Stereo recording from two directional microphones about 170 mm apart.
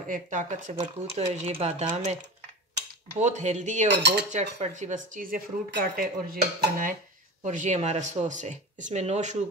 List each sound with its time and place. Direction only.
0.1 s speech: 50° right (ahead or behind)
3.2 s speech: 45° right (ahead or behind)
3.9 s cutlery: 90° right
4.3 s speech: 45° right (ahead or behind)
5.7 s dishes: 60° right (ahead or behind)
7.4 s speech: 45° right (ahead or behind)